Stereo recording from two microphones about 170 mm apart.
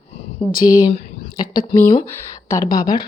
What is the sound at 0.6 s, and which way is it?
Speech, 20° left (ahead or behind).